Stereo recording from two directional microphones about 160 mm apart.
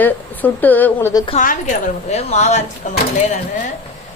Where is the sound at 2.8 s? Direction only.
55° left (ahead or behind).